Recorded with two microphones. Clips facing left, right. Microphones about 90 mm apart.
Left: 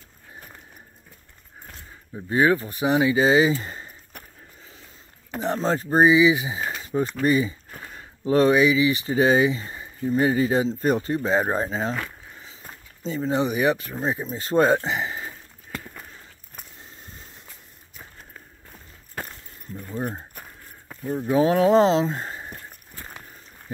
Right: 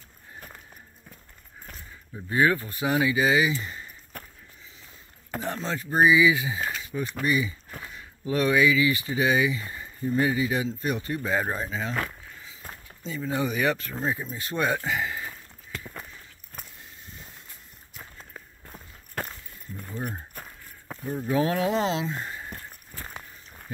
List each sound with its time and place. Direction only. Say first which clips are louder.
2.2 s speech: left 3 dB; 25° left (ahead or behind)
5.4 s speech: left 8 dB; 35° left (ahead or behind)
6.8 s a sound: left 7 dB; 40° left (ahead or behind)
7.2 s speech: left 3 dB; 35° left (ahead or behind)
9.1 s speech: left 7 dB; 35° left (ahead or behind)
10.3 s speech: left 5 dB; 35° left (ahead or behind)
13.0 s speech: left 5 dB; 30° left (ahead or behind)
13.5 s speech: left 4 dB; 15° left (ahead or behind)
20.0 s a sound: left 5 dB; 20° left (ahead or behind)
21.1 s speech: left 5 dB; 20° left (ahead or behind)